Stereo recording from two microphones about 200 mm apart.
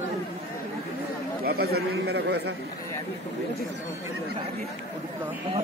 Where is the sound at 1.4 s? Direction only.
50° right (ahead or behind).